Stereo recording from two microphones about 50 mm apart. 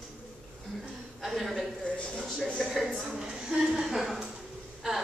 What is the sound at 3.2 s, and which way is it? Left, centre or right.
A woman's voice, centre.